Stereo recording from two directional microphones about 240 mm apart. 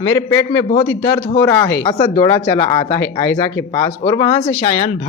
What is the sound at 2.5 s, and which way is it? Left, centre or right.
Speech, left.